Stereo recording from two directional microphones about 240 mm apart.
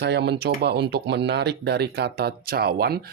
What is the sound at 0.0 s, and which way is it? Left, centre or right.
Speech, right.